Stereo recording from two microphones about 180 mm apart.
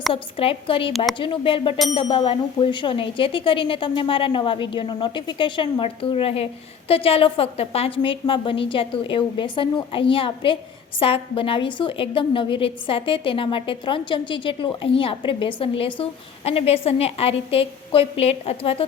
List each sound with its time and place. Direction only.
0.1 s a woman's voice: 30° left (ahead or behind)